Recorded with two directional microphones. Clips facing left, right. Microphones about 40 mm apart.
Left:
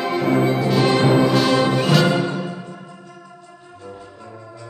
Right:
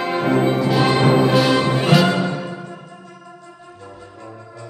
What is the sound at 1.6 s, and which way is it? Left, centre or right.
Music, right.